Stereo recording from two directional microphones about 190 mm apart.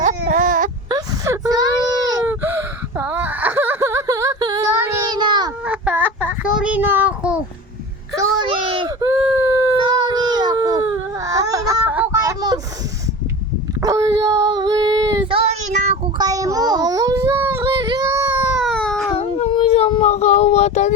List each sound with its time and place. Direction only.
0.0 s baby cry: 45° right (ahead or behind)
0.9 s a sound: 20° right (ahead or behind)
5.6 s a sound: 10° right (ahead or behind)
6.7 s child singing: 10° right (ahead or behind)
8.1 s a sound: 20° right (ahead or behind)
9.8 s baby cry: 20° right (ahead or behind)
13.8 s child singing: 20° right (ahead or behind); by 15.9 s 35° right (ahead or behind)
16.1 s child singing: 20° right (ahead or behind)
17.8 s baby cry: 20° right (ahead or behind)
18.6 s baby cry: 5° left (ahead or behind)
19.1 s child singing: 30° left (ahead or behind)